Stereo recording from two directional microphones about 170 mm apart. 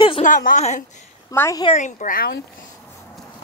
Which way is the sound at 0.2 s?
50° left (ahead or behind).